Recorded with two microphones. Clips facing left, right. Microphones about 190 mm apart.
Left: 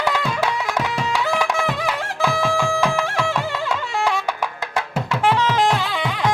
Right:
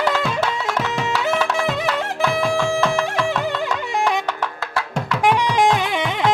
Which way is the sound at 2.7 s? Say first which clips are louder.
Right 1 dB; 15° left (ahead or behind).